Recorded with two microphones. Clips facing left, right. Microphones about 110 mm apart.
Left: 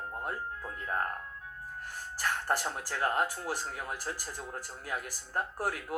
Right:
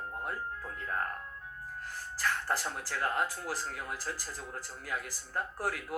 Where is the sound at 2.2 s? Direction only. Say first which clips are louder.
Left 1 dB; 25° left (ahead or behind).